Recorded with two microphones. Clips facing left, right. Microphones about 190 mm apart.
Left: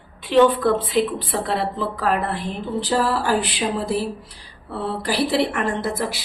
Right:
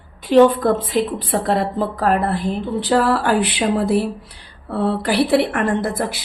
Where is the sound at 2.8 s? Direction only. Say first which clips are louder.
Right 4 dB; 60° right (ahead or behind).